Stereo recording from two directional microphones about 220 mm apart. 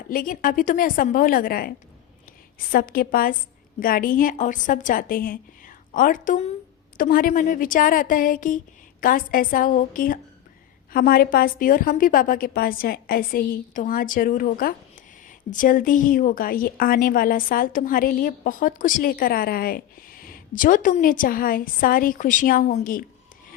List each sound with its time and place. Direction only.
0.1 s a woman's voice: 40° left (ahead or behind)
2.7 s a woman's voice: 40° left (ahead or behind)